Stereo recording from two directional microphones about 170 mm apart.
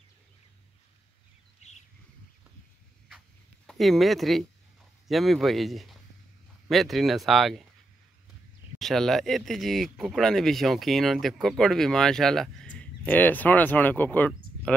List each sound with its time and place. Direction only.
1.6 s bird: 40° left (ahead or behind)
3.6 s speech: centre (ahead or behind)
8.7 s speech: centre (ahead or behind)